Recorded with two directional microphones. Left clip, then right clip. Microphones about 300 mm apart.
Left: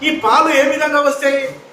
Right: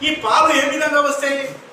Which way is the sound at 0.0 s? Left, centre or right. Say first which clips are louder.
Left 2 dB; centre.